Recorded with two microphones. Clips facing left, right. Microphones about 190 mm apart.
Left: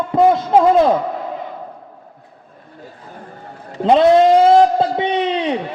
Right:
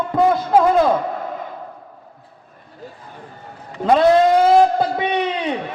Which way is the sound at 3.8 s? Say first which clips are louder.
Left 3 dB; 25° left (ahead or behind).